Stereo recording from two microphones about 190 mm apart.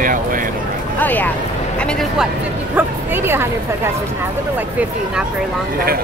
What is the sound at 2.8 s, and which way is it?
Speech, 10° right (ahead or behind).